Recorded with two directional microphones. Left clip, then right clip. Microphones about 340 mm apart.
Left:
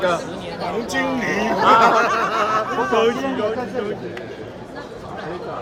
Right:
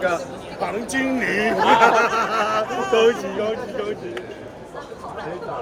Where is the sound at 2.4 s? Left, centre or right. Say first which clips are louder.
Left 2 dB; centre.